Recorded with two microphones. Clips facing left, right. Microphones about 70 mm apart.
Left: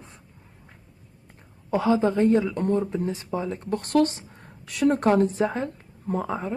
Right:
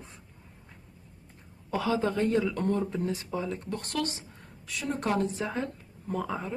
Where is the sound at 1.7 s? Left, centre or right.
Left.